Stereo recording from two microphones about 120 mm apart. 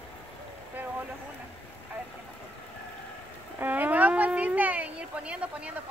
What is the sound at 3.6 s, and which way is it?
A woman's voice, 15° right (ahead or behind).